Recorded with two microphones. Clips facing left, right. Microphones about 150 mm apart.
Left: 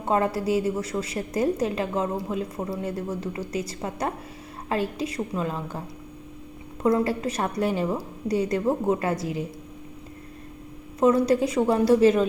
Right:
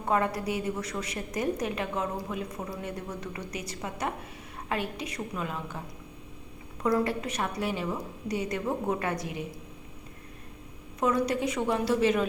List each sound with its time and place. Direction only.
0.0 s a woman's voice: 30° left (ahead or behind)
6.8 s a woman's voice: 30° left (ahead or behind)
11.0 s a woman's voice: 30° left (ahead or behind)